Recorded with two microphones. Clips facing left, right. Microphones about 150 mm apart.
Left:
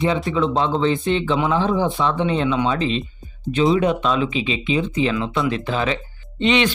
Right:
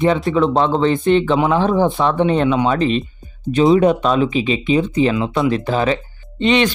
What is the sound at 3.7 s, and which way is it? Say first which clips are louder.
Speech: right 5 dB; 45° right (ahead or behind).